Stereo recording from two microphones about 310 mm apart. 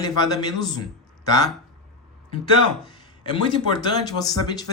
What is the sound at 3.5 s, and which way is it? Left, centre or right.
Speech, centre.